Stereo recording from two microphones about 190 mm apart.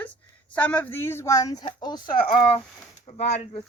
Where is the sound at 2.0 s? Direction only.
50° left (ahead or behind).